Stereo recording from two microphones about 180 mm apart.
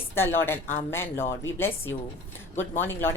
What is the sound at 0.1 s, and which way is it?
A woman's voice, 15° left (ahead or behind).